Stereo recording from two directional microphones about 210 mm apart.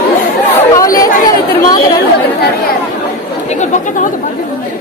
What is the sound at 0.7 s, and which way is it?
Chatter, 15° left (ahead or behind).